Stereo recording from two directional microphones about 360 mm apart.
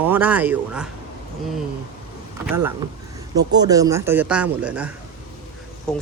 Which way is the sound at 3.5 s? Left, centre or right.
Centre.